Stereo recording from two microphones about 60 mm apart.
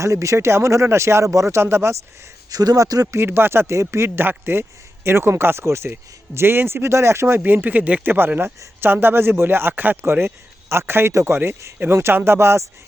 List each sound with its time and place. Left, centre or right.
0.0 s speech: right
0.3 s speech: right
2.5 s speech: right
3.2 s speech: right
7.3 s speech: right
11.3 s speech: right